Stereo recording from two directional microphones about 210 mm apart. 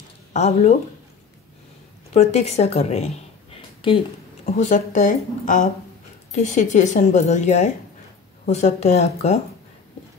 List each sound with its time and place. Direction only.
0.3 s a woman's voice: 35° left (ahead or behind)
2.1 s a woman's voice: 30° left (ahead or behind)
4.6 s a woman's voice: 35° left (ahead or behind)